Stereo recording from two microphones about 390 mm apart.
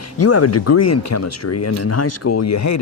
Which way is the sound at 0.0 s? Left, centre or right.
Left.